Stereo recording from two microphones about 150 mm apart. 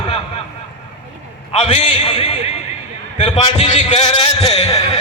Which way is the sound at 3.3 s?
40° left (ahead or behind).